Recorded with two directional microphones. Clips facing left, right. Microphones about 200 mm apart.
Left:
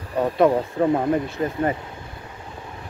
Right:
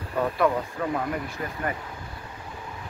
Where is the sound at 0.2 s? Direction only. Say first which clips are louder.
Left 6 dB; 25° left (ahead or behind).